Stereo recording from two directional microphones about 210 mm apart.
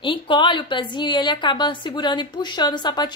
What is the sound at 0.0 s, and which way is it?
A woman's voice, 25° left (ahead or behind).